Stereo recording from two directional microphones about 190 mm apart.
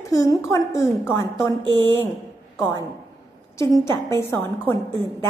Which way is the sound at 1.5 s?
25° right (ahead or behind).